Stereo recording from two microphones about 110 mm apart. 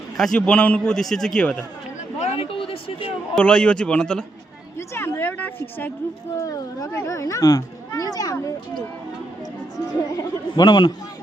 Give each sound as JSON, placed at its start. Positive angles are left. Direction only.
{"t": 0.2, "sound": "a man's voice", "side_deg": 5}
{"t": 2.1, "sound": "a sound", "side_deg": 80}
{"t": 3.3, "sound": "a man's voice", "side_deg": 10}
{"t": 4.9, "sound": "a sound", "side_deg": 20}
{"t": 6.3, "sound": "speech", "side_deg": 30}
{"t": 10.2, "sound": "a man's voice", "side_deg": 40}